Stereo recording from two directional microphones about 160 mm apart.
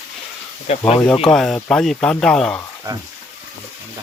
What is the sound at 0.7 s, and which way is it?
Speech, 45° left (ahead or behind).